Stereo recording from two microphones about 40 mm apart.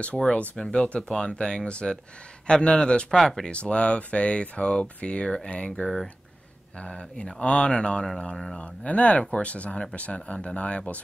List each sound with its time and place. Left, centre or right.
0.0 s speech: left
6.8 s speech: left
8.5 s speech: left